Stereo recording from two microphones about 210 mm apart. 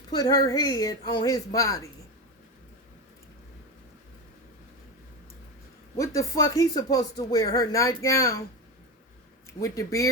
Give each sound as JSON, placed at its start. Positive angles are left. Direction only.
{"t": 0.1, "sound": "speech", "side_deg": 20}
{"t": 6.0, "sound": "speech", "side_deg": 15}
{"t": 9.6, "sound": "speech", "side_deg": 15}